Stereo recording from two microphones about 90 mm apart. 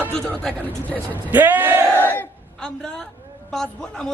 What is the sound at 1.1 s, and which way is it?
Speech, 20° right (ahead or behind).